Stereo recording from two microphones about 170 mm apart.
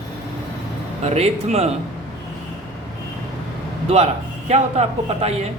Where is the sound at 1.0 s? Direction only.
40° right (ahead or behind).